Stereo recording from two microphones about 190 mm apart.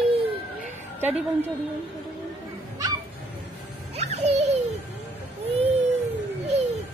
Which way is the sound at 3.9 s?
35° right (ahead or behind).